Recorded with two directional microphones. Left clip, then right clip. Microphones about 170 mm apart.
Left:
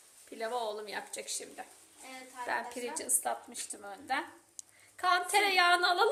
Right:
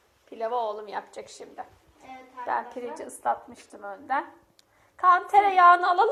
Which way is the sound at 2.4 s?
20° left (ahead or behind).